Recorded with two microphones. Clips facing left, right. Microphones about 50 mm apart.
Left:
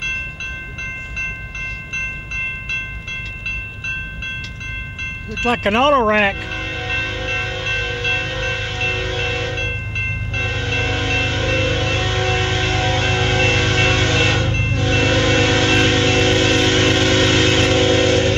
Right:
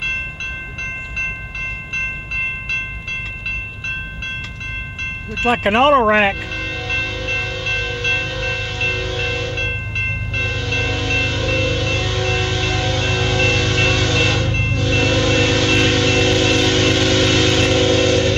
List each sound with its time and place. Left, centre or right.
2.0 s train: centre
5.3 s speech: centre
6.5 s music: left
8.2 s train: left
8.9 s wind chime: left
9.6 s train: centre
10.4 s train: left
11.2 s music: left
14.7 s train: left
16.0 s vehicle: left